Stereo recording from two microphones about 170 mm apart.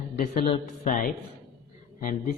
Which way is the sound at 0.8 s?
50° left (ahead or behind).